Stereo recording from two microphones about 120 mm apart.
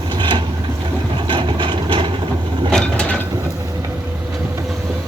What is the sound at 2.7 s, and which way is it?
Mechanisms, 10° left (ahead or behind).